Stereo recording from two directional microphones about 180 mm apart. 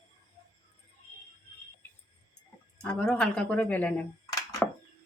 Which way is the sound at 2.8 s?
10° left (ahead or behind).